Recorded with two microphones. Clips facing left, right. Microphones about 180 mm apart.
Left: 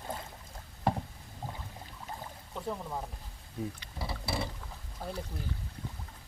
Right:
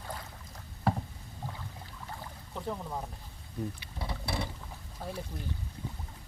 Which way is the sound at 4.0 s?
5° left (ahead or behind).